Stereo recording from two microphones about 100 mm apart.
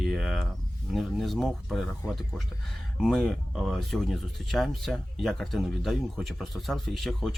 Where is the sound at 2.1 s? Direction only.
5° left (ahead or behind).